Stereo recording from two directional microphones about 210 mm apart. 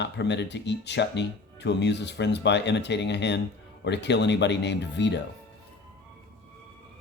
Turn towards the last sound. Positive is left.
turn(degrees=55)  # may be behind; listen again after turning